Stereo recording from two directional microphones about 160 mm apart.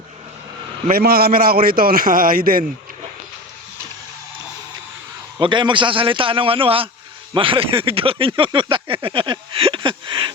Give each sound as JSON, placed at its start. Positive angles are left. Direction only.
{"t": 0.9, "sound": "a man's voice", "side_deg": -70}
{"t": 5.4, "sound": "speech", "side_deg": -30}